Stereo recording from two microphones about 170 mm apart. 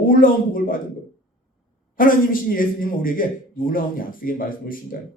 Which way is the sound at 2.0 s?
55° left (ahead or behind).